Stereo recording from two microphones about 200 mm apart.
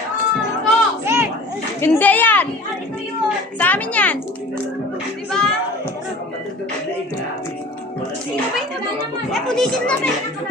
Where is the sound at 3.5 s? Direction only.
10° left (ahead or behind).